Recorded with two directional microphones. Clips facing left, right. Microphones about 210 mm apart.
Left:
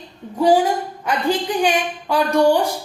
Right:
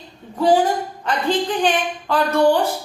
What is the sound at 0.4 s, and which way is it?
A woman's voice, 10° left (ahead or behind).